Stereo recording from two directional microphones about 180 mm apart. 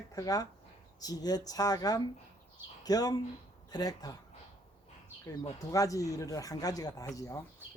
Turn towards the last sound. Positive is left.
turn(degrees=15)  # may be behind; listen again after turning